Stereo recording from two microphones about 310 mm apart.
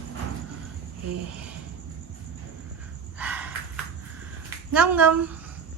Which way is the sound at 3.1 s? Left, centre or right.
Centre.